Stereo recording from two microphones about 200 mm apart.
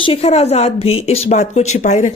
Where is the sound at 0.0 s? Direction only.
30° left (ahead or behind).